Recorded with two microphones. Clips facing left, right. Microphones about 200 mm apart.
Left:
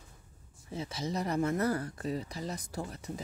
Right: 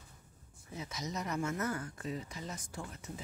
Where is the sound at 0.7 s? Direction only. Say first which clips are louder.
Left 6 dB; 30° left (ahead or behind).